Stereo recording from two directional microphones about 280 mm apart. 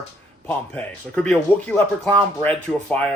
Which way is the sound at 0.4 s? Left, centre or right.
Centre.